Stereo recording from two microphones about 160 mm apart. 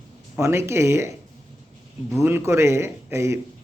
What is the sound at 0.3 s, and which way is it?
Speech, 15° right (ahead or behind).